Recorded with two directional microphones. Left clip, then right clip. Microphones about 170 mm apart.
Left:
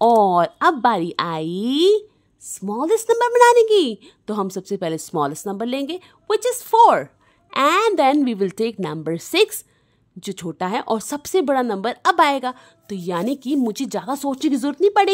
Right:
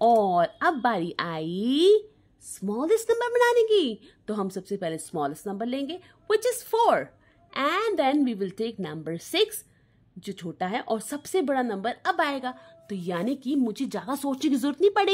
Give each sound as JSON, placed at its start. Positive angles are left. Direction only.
{"t": 0.0, "sound": "a woman's voice", "side_deg": 30}